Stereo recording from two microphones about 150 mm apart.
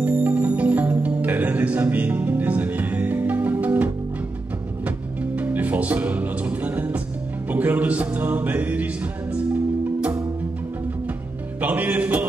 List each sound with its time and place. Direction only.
0.0 s music: 10° right (ahead or behind)
11.6 s music: 10° right (ahead or behind)